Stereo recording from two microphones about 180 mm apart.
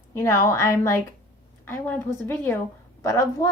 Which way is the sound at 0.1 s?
15° left (ahead or behind).